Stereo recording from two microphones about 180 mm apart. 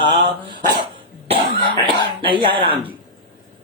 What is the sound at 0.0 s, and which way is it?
Speech, 25° right (ahead or behind).